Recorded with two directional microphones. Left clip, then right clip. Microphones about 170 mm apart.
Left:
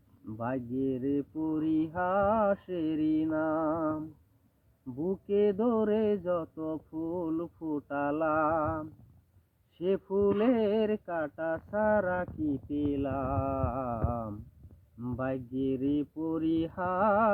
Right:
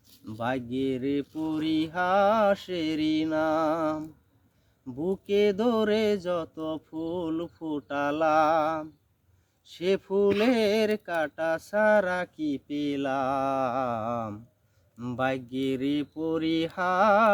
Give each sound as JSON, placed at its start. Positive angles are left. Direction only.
{"t": 0.3, "sound": "speech", "side_deg": -25}